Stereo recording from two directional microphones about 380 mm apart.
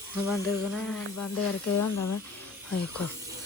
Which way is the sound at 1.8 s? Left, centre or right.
Left.